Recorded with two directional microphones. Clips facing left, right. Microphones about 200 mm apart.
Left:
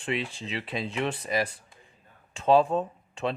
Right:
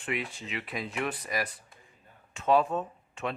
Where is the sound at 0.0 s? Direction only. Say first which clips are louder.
Left 3 dB; 30° left (ahead or behind).